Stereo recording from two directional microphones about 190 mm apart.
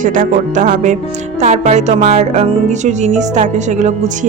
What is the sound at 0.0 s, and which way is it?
A woman's voice, 45° right (ahead or behind).